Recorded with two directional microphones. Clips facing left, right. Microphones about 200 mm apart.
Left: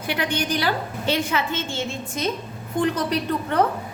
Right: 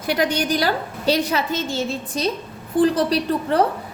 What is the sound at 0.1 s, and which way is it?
A woman's voice, 40° right (ahead or behind).